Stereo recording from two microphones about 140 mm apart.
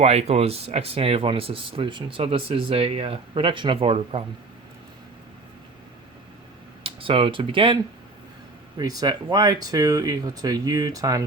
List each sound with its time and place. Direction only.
0.0 s speech: 50° right (ahead or behind)
6.8 s speech: 40° right (ahead or behind)
8.8 s speech: 30° right (ahead or behind)